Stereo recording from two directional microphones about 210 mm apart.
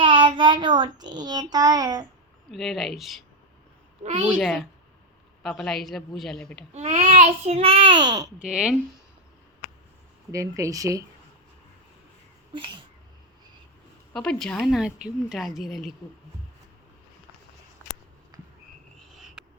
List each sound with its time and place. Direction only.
0.0 s a child's voice: 25° right (ahead or behind)
2.5 s a woman's voice: centre (ahead or behind)
4.0 s a child's voice: 30° right (ahead or behind)
4.3 s a woman's voice: centre (ahead or behind)
6.7 s a child's voice: 30° right (ahead or behind)
8.4 s a woman's voice: 5° right (ahead or behind)
10.3 s speech: 15° right (ahead or behind)
14.1 s a woman's voice: 5° left (ahead or behind)